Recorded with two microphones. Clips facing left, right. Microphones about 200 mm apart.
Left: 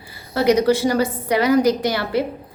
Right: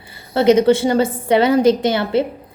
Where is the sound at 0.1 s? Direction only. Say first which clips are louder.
Right 4 dB; 25° right (ahead or behind).